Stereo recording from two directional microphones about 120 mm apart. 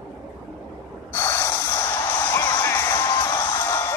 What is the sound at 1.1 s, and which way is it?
Music, 20° left (ahead or behind).